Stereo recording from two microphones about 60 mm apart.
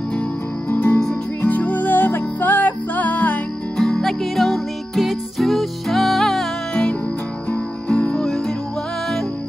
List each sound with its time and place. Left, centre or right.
0.7 s music: left
3.7 s music: centre
6.7 s music: centre
8.1 s music: centre